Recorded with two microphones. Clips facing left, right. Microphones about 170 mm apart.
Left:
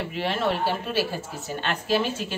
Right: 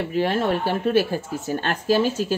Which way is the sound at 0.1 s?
45° right (ahead or behind).